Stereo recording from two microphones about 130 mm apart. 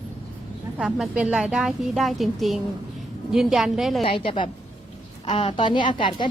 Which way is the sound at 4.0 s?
45° left (ahead or behind).